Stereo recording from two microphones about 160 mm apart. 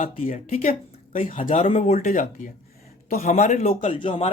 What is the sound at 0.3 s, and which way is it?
Speech, 50° left (ahead or behind).